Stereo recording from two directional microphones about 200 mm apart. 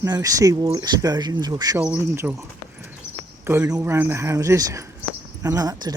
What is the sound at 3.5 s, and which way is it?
Speech, 15° right (ahead or behind).